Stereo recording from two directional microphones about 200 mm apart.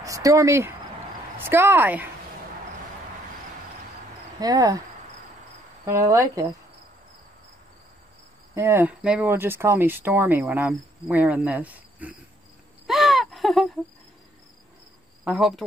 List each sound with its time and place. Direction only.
0.0 s speech: 15° right (ahead or behind)
4.4 s speech: 20° right (ahead or behind)
5.9 s speech: 15° right (ahead or behind)
8.5 s speech: 10° right (ahead or behind)
12.8 s a sound: centre (ahead or behind)
15.2 s cricket: centre (ahead or behind)